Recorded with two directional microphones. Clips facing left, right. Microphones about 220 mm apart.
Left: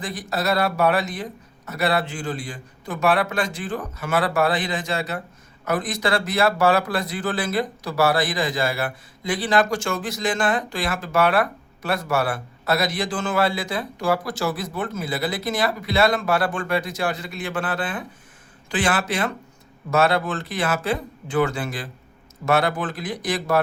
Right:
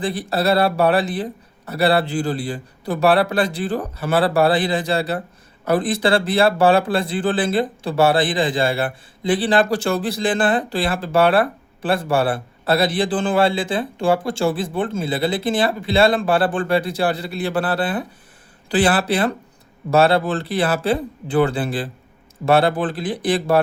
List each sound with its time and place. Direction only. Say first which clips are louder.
0.0 s a man's voice: right 6 dB; 30° right (ahead or behind)